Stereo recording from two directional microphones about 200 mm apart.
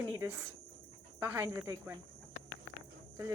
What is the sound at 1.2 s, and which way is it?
Speech, 10° right (ahead or behind).